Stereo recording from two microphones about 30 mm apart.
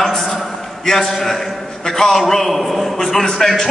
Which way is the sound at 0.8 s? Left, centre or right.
Centre.